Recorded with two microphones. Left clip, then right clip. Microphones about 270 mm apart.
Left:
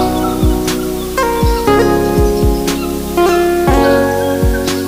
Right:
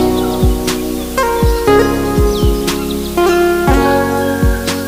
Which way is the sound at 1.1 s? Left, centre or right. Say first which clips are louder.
Even; left.